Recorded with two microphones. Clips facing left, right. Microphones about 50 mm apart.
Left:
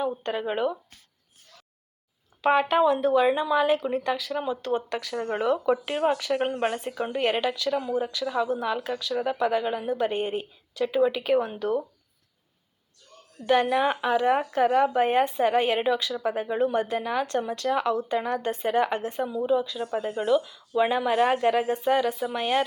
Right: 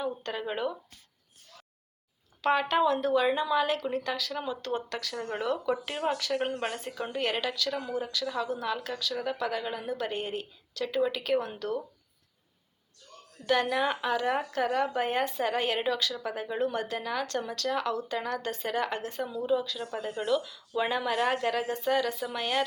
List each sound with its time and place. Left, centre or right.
0.0 s a woman's voice: centre
2.4 s a woman's voice: centre
13.5 s a woman's voice: centre